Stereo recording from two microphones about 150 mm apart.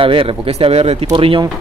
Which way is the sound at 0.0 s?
35° right (ahead or behind).